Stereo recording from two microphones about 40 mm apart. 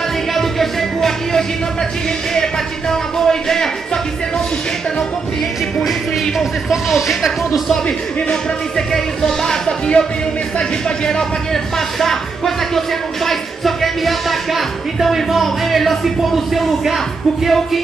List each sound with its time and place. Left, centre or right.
0.3 s music: centre
5.9 s speech: centre
8.7 s speech: centre
11.1 s speech: centre